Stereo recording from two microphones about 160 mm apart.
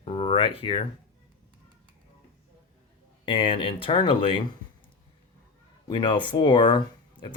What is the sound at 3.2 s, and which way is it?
Speech, 35° left (ahead or behind).